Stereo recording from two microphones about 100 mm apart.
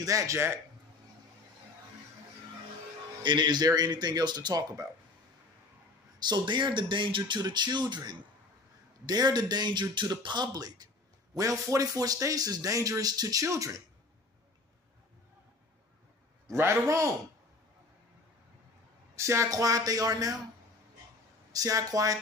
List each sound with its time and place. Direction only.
0.0 s speech: 30° right (ahead or behind)
3.2 s speech: 50° right (ahead or behind)
6.1 s speech: 45° right (ahead or behind)
16.5 s a man's voice: 30° right (ahead or behind)
19.1 s speech: 30° right (ahead or behind)
21.5 s speech: 35° right (ahead or behind)